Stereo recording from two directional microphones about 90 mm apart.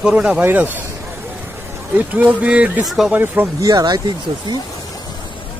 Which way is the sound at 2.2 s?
15° right (ahead or behind).